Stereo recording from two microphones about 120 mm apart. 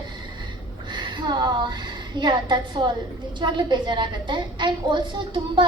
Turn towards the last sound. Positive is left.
turn(degrees=-40)  # may be behind; listen again after turning